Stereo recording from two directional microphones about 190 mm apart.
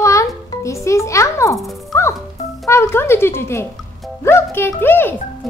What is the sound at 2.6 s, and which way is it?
A child's voice, 15° left (ahead or behind).